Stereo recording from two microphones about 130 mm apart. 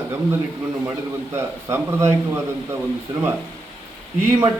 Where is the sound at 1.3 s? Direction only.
20° right (ahead or behind).